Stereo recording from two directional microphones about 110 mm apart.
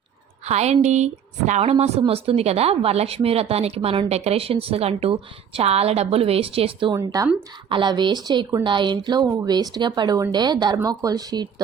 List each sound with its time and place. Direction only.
0.4 s a woman's voice: 80° right; by 6.9 s 55° right (ahead or behind)
6.9 s a woman's voice: 35° right (ahead or behind)
7.7 s a woman's voice: 45° right (ahead or behind)